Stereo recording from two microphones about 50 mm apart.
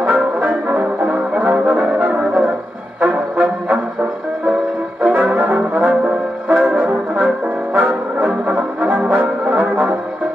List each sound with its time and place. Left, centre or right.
0.0 s brass instrument: right
5.0 s brass instrument: right